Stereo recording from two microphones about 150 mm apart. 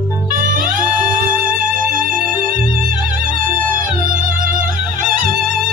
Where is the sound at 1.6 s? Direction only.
65° right (ahead or behind).